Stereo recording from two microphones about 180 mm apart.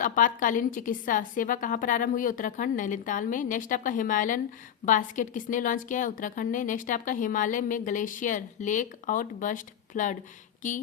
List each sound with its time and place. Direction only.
0.0 s a woman's voice: 50° left (ahead or behind)